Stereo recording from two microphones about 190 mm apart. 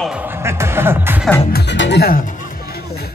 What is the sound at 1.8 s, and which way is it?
Speech, 65° left (ahead or behind).